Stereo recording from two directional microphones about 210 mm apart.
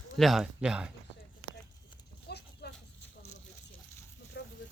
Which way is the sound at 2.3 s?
50° left (ahead or behind).